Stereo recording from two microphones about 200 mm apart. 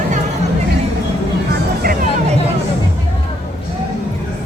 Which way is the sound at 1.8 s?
45° right (ahead or behind).